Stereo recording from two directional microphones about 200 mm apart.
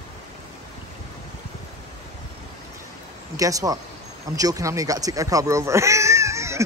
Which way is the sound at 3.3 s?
15° right (ahead or behind).